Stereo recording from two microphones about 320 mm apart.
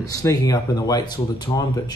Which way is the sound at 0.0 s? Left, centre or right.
Centre.